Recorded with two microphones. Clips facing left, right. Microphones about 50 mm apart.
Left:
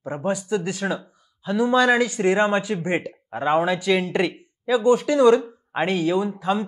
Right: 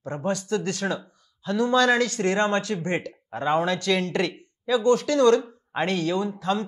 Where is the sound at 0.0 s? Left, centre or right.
Centre.